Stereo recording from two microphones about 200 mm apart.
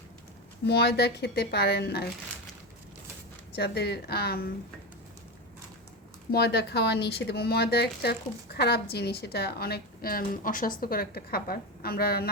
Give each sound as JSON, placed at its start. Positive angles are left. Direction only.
{"t": 0.6, "sound": "speech", "side_deg": 55}
{"t": 3.5, "sound": "speech", "side_deg": 55}
{"t": 6.3, "sound": "speech", "side_deg": 55}